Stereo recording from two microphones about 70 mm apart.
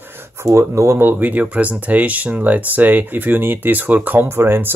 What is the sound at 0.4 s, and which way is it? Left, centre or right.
Speech, right.